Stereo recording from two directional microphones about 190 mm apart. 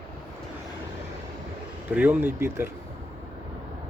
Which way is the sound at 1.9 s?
5° right (ahead or behind).